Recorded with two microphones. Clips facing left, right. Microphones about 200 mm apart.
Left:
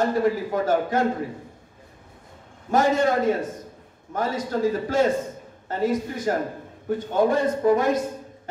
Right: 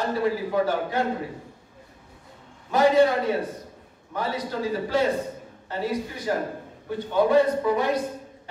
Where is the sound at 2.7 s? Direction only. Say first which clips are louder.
Right 1 dB; 45° left (ahead or behind).